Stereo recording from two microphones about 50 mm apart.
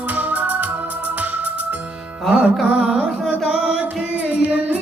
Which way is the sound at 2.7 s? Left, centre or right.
Right.